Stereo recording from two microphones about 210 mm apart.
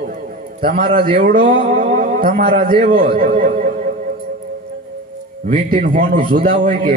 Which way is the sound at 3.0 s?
40° right (ahead or behind).